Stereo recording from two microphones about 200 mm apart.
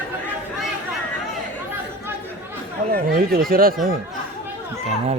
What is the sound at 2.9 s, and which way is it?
Speech, 50° right (ahead or behind).